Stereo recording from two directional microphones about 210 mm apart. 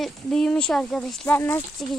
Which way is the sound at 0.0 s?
Centre (ahead or behind).